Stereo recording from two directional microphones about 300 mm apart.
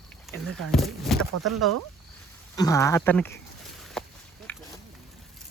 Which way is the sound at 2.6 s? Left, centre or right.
Centre.